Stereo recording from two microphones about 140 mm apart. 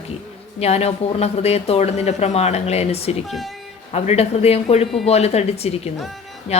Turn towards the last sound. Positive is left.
turn(degrees=50)  # may be behind; listen again after turning